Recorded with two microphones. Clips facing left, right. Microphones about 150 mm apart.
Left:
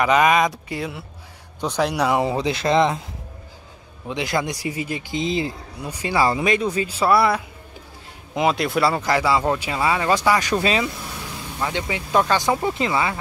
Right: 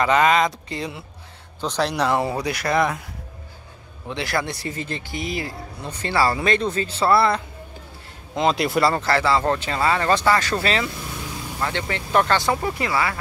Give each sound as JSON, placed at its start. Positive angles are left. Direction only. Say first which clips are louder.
{"t": 0.0, "sound": "speech", "louder": "left 1 dB", "side_deg": 15}
{"t": 4.1, "sound": "speech", "louder": "left 2 dB", "side_deg": 15}
{"t": 8.5, "sound": "speech", "louder": "even", "side_deg": 0}